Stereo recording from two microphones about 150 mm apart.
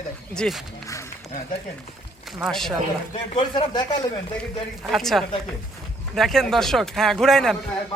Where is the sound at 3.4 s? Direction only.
30° left (ahead or behind).